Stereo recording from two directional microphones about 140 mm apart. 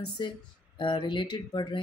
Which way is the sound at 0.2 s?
35° left (ahead or behind).